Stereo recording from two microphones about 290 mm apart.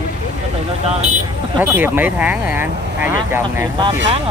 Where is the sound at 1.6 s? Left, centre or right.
Centre.